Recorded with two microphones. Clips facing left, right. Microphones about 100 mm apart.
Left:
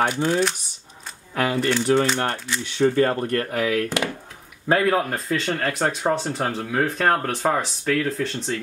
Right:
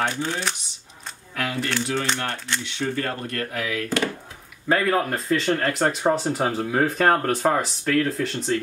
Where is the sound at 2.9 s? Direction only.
40° left (ahead or behind).